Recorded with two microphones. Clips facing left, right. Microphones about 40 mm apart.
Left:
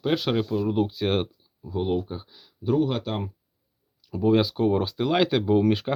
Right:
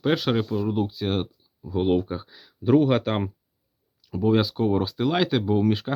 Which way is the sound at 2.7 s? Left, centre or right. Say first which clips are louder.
Right 5 dB; right.